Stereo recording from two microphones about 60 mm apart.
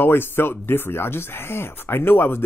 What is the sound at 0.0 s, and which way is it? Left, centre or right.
Speech, left.